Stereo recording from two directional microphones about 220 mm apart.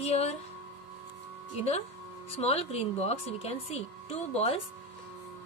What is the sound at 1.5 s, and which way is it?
A woman's voice, 30° left (ahead or behind).